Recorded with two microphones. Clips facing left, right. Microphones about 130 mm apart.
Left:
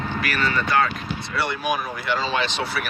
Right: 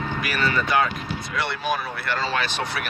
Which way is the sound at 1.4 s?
10° left (ahead or behind).